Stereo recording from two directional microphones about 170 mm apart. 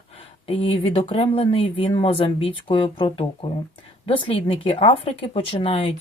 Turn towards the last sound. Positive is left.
turn(degrees=35)  # may be behind; listen again after turning